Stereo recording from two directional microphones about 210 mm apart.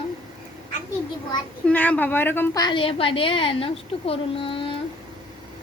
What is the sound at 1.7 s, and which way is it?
A woman's voice, 10° left (ahead or behind).